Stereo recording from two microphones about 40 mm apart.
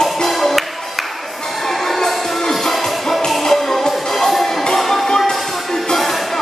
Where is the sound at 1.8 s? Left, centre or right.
Centre.